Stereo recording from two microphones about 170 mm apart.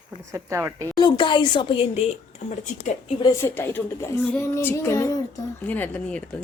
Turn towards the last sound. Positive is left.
turn(degrees=10)  # may be behind; listen again after turning